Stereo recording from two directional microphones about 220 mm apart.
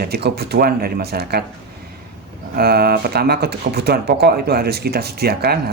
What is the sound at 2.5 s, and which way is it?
Speech, 45° right (ahead or behind).